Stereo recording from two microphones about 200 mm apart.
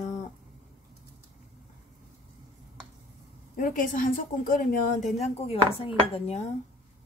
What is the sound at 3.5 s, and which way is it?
A woman's voice, 40° left (ahead or behind).